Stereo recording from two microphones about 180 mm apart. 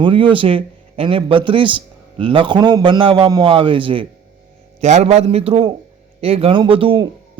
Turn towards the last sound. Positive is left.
turn(degrees=-30)  # may be behind; listen again after turning